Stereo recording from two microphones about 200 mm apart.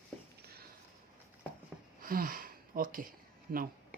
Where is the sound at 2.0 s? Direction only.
45° right (ahead or behind).